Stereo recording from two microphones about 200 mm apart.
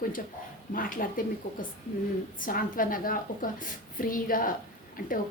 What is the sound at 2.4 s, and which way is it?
A woman's voice, 45° left (ahead or behind).